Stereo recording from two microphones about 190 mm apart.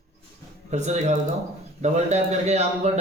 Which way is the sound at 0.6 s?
35° right (ahead or behind).